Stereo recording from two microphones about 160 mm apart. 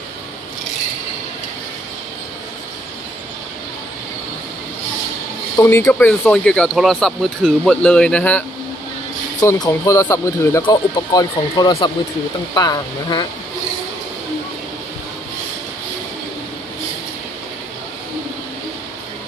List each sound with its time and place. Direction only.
5.6 s speech: 15° left (ahead or behind)
9.4 s speech: 20° left (ahead or behind)